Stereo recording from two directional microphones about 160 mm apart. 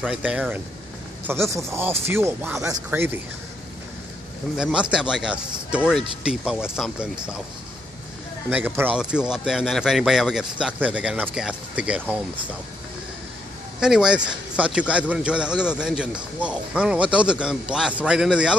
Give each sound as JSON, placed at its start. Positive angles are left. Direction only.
{"t": 0.0, "sound": "speech", "side_deg": -10}
{"t": 4.6, "sound": "a man's voice", "side_deg": -5}
{"t": 8.5, "sound": "a man's voice", "side_deg": -10}
{"t": 13.7, "sound": "a man's voice", "side_deg": -5}